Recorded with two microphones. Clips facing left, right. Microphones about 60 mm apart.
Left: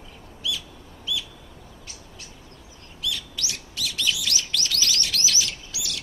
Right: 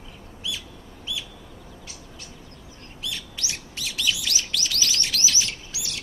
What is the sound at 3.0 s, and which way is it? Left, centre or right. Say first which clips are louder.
Bird: left 3 dB; right.